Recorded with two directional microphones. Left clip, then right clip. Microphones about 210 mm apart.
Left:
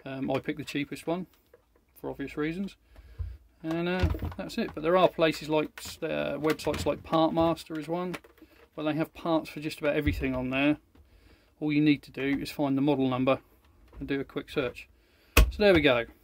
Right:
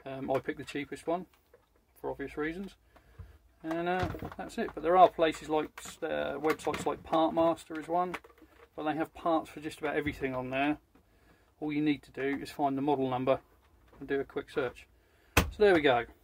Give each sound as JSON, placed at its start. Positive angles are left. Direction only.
{"t": 0.0, "sound": "speech", "side_deg": 55}
{"t": 3.7, "sound": "speech", "side_deg": 55}
{"t": 15.6, "sound": "speech", "side_deg": 70}